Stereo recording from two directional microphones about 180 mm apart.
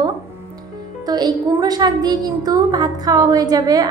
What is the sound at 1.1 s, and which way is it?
A woman's voice, 20° right (ahead or behind).